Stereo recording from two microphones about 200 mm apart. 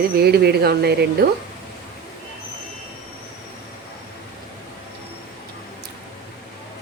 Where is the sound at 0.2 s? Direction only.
55° right (ahead or behind).